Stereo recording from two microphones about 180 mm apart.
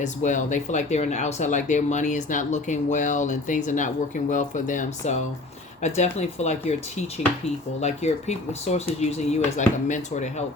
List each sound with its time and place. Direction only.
0.0 s speech: 45° left (ahead or behind)